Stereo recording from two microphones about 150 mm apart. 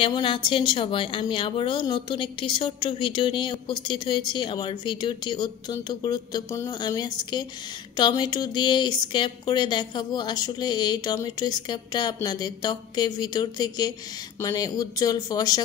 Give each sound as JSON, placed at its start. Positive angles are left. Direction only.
{"t": 0.0, "sound": "speech", "side_deg": 35}